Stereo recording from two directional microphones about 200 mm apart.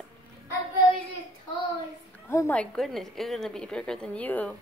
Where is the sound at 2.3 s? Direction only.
10° left (ahead or behind).